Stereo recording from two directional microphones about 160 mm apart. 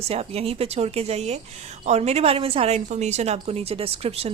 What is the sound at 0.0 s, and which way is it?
A woman's voice, 40° right (ahead or behind).